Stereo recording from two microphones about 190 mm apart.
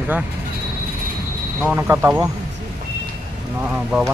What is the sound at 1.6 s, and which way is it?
Speech, 10° right (ahead or behind).